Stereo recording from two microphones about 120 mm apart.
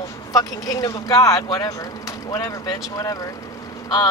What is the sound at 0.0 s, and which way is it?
Speech, 30° left (ahead or behind).